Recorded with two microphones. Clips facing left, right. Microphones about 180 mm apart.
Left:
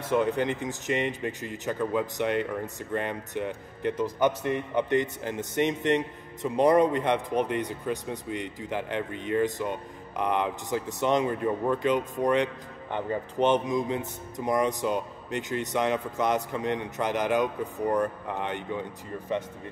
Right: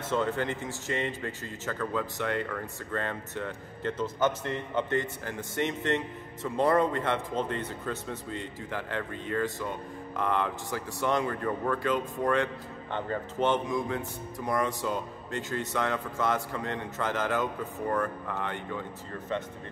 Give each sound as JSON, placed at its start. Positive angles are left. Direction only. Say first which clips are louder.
{"t": 0.1, "sound": "a man's voice", "louder": "left 4 dB", "side_deg": 15}